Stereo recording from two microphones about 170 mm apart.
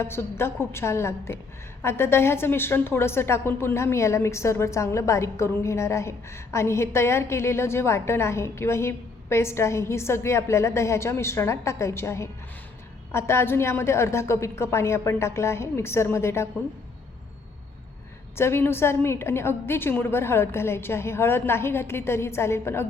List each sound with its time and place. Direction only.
0.0 s a woman's voice: 15° left (ahead or behind)
18.3 s a woman's voice: 15° left (ahead or behind)